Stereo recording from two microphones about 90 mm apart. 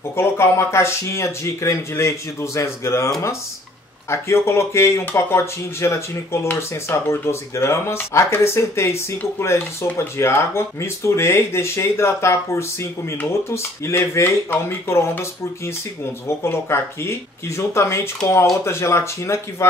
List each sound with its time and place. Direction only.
0.1 s speech: 30° left (ahead or behind)
4.1 s speech: 30° left (ahead or behind)